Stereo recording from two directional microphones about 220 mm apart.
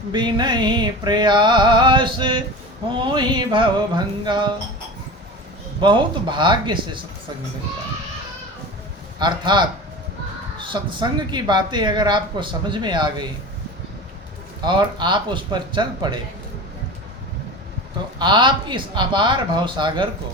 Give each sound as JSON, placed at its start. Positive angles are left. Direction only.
{"t": 0.1, "sound": "speech", "side_deg": -20}
{"t": 5.8, "sound": "speech", "side_deg": -20}
{"t": 9.1, "sound": "speech", "side_deg": -20}
{"t": 10.7, "sound": "speech", "side_deg": -20}
{"t": 14.6, "sound": "speech", "side_deg": -20}
{"t": 18.2, "sound": "speech", "side_deg": -20}